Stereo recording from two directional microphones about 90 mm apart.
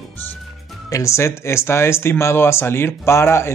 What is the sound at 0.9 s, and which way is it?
Speech, 35° left (ahead or behind).